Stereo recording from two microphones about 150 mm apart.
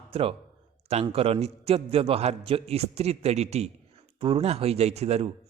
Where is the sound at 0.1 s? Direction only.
40° right (ahead or behind).